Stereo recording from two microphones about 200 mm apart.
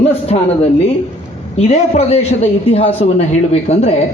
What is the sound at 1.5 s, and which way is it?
A man's voice, 30° left (ahead or behind).